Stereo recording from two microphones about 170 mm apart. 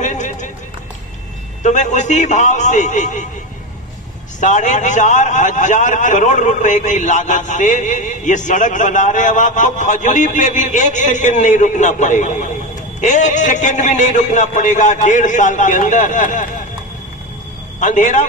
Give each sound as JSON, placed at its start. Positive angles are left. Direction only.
{"t": 0.0, "sound": "run", "side_deg": 45}
{"t": 1.6, "sound": "a man's voice", "side_deg": 45}
{"t": 4.4, "sound": "a man's voice", "side_deg": 45}
{"t": 17.7, "sound": "a man's voice", "side_deg": 45}